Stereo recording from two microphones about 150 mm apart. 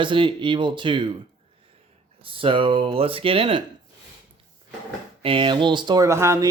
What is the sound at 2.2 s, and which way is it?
Speech, 35° right (ahead or behind).